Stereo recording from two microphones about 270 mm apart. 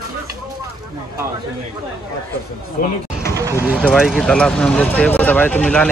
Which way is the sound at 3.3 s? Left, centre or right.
Centre.